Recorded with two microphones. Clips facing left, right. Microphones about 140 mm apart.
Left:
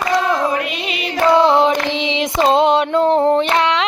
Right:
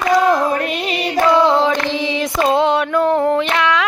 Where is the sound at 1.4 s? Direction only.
20° left (ahead or behind).